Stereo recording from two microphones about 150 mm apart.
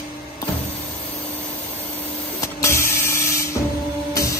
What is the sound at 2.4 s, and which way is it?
Printer, 20° left (ahead or behind).